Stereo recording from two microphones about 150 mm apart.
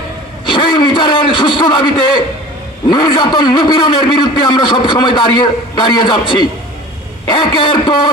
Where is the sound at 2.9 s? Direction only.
30° left (ahead or behind).